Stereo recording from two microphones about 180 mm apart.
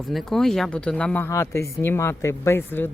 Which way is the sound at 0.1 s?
Centre (ahead or behind).